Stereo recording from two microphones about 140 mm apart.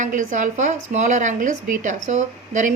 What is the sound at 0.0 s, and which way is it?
A woman's voice, 65° right (ahead or behind).